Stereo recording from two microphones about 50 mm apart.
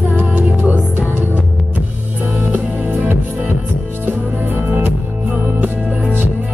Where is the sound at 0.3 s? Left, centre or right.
Right.